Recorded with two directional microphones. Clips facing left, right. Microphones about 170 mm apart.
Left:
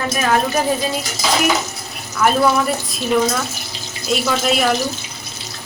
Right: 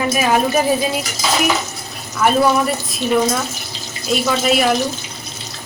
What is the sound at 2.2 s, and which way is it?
Speech, centre (ahead or behind).